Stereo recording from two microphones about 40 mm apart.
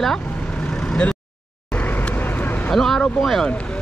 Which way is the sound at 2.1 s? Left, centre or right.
Left.